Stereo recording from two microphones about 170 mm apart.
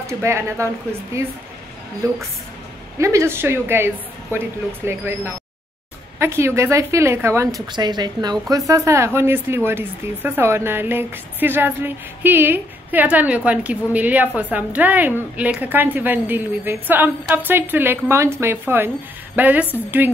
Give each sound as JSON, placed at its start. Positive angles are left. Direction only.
{"t": 0.0, "sound": "a woman's voice", "side_deg": -15}
{"t": 2.0, "sound": "a woman's voice", "side_deg": -20}